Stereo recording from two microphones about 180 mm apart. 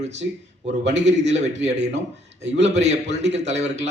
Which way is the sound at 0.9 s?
40° right (ahead or behind).